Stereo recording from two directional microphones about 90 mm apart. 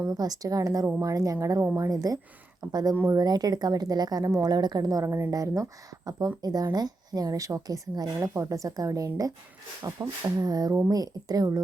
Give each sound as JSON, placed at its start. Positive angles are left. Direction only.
{"t": 0.1, "sound": "a woman's voice", "side_deg": -45}